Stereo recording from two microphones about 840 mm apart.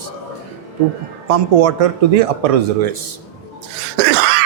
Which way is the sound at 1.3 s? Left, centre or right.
Right.